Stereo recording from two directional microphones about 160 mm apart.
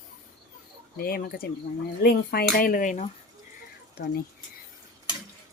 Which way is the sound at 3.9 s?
90° left.